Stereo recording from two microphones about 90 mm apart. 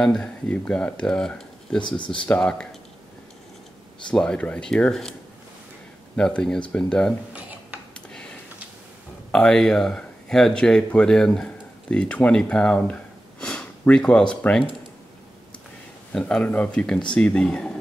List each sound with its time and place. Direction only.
0.0 s speech: 10° left (ahead or behind)
1.8 s speech: 60° left (ahead or behind)
2.2 s speech: 10° left (ahead or behind)
4.1 s speech: 10° left (ahead or behind)
6.1 s speech: 10° left (ahead or behind)
7.9 s a sound: 10° left (ahead or behind)
9.3 s speech: 5° left (ahead or behind)
16.1 s speech: 10° left (ahead or behind)